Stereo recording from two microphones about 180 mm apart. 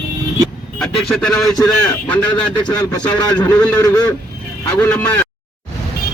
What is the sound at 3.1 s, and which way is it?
Speech, 25° left (ahead or behind).